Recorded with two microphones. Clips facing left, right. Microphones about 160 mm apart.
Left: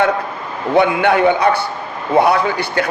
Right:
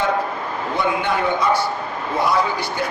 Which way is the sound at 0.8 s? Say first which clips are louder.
Left 9 dB; 65° left (ahead or behind).